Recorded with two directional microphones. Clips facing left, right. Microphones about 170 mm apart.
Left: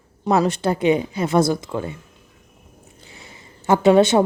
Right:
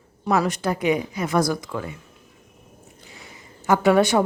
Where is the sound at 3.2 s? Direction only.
25° left (ahead or behind).